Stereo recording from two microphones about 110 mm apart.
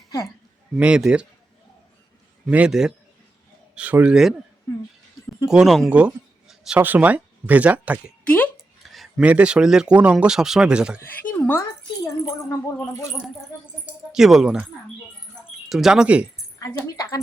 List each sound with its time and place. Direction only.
0.8 s speech: 10° right (ahead or behind)
2.5 s speech: 10° right (ahead or behind)
5.5 s speech: centre (ahead or behind)
5.9 s a sound: 10° right (ahead or behind)
6.8 s speech: 15° right (ahead or behind)
8.2 s speech: 10° left (ahead or behind)
8.5 s a sound: centre (ahead or behind)
9.2 s speech: 10° right (ahead or behind)
11.0 s speech: 15° left (ahead or behind)
12.2 s speech: 30° left (ahead or behind)
13.8 s speech: 5° right (ahead or behind)
15.7 s speech: 5° right (ahead or behind)